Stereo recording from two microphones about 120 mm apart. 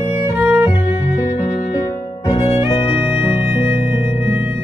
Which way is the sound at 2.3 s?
50° left (ahead or behind).